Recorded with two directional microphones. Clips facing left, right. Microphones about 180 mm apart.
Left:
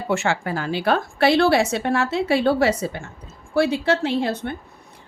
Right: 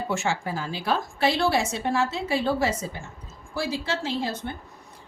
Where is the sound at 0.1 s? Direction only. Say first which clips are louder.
Left 8 dB; 65° left (ahead or behind).